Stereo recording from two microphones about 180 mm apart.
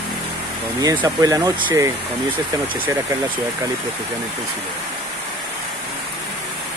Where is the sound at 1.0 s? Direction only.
20° right (ahead or behind).